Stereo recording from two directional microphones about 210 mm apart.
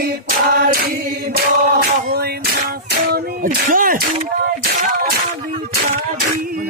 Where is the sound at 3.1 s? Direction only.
40° right (ahead or behind).